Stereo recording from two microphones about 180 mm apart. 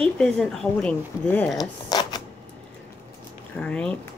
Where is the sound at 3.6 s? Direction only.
5° left (ahead or behind).